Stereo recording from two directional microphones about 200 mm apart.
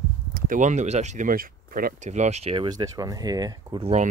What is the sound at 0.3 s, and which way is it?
Speech, 40° right (ahead or behind).